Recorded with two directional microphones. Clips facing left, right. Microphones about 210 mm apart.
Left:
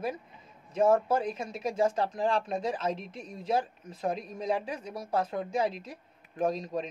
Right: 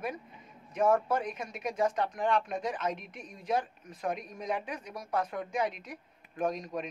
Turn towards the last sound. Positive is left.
turn(degrees=30)  # may be behind; listen again after turning